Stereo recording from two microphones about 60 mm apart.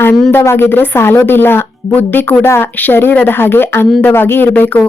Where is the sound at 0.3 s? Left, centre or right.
Left.